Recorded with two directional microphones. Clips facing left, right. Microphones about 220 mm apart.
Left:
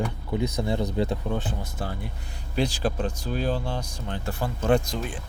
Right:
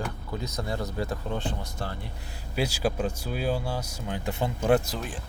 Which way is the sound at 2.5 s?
10° right (ahead or behind).